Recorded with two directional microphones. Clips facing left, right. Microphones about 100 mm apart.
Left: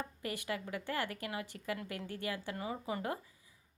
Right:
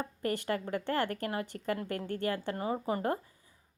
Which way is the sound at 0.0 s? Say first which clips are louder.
Right 7 dB; 45° right (ahead or behind).